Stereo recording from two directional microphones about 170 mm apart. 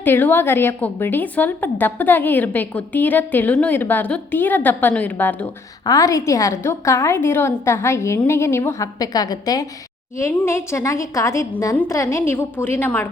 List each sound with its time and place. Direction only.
0.0 s a woman's voice: 10° left (ahead or behind)